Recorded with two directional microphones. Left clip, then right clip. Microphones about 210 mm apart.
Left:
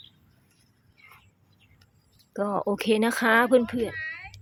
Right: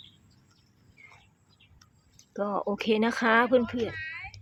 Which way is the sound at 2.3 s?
15° left (ahead or behind).